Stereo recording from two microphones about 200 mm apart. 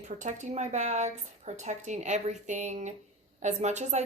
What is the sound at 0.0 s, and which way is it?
A woman's voice, 40° right (ahead or behind).